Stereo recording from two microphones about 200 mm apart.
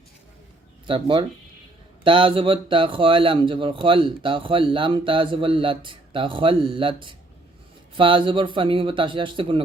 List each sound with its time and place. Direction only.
0.9 s a man's voice: 25° right (ahead or behind)